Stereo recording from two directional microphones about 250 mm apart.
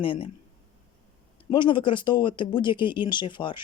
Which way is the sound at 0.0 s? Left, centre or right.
Left.